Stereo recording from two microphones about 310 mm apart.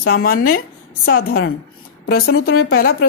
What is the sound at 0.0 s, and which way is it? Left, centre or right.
Speech, left.